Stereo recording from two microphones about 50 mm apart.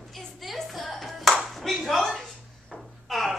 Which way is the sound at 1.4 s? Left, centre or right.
Centre.